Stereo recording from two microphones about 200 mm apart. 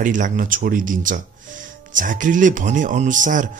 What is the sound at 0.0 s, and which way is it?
Speech, 40° right (ahead or behind).